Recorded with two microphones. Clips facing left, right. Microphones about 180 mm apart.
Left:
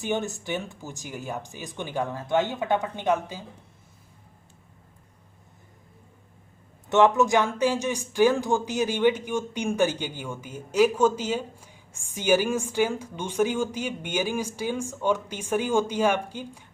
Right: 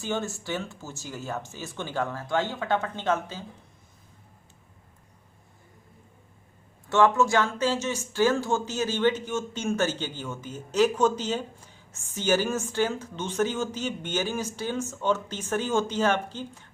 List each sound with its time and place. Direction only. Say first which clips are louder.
0.0 s speech: left 2 dB; 20° left (ahead or behind)
6.8 s speech: left 2 dB; 20° left (ahead or behind)